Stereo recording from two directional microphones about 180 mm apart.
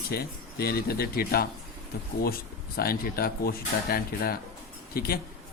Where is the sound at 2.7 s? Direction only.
55° left (ahead or behind).